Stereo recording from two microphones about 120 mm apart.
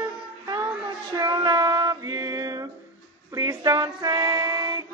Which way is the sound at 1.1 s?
30° right (ahead or behind).